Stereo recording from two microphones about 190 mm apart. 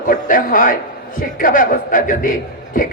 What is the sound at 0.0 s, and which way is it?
A man's voice, 45° left (ahead or behind).